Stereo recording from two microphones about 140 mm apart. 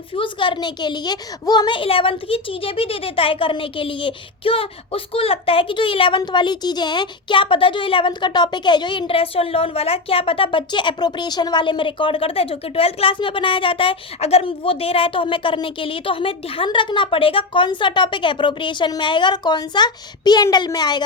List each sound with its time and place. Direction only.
0.1 s a child's voice: 35° left (ahead or behind)